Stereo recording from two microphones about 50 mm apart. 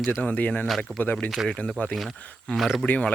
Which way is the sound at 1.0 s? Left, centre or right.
Left.